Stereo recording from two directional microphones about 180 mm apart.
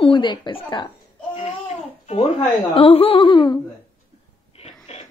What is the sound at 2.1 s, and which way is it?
A woman's voice, 35° left (ahead or behind).